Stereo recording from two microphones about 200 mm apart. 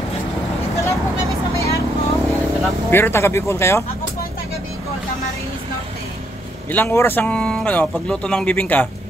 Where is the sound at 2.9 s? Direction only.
10° left (ahead or behind).